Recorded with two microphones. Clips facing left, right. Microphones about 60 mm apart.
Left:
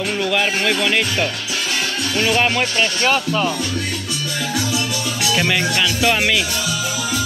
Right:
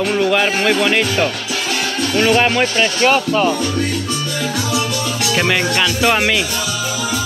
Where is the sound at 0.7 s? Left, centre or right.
Right.